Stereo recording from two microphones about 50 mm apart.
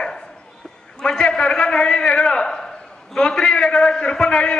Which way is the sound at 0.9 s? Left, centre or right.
Centre.